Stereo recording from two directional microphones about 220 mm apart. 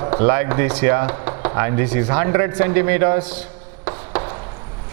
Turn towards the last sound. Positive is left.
turn(degrees=-10)  # may be behind; listen again after turning